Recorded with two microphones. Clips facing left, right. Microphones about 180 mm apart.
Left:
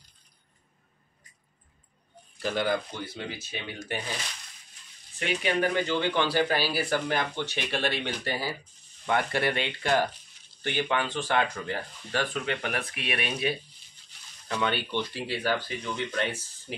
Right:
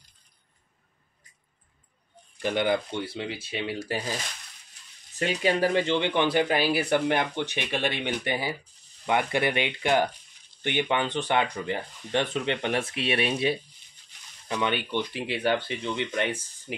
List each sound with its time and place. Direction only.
2.4 s speech: 20° right (ahead or behind)
5.1 s speech: 40° right (ahead or behind)
14.5 s speech: 15° right (ahead or behind)